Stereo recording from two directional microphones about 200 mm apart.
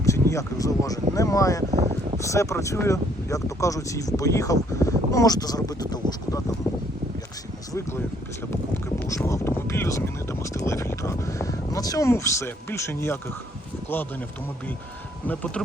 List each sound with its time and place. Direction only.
0.0 s speech: 15° left (ahead or behind)
1.7 s a sound: 30° right (ahead or behind)
2.3 s speech: 15° left (ahead or behind)
7.7 s speech: 15° left (ahead or behind)
9.0 s speech: 15° left (ahead or behind)